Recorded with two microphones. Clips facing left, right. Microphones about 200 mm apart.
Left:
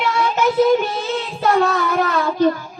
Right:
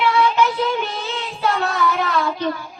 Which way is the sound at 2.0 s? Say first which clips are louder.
Left 5 dB; 45° left (ahead or behind).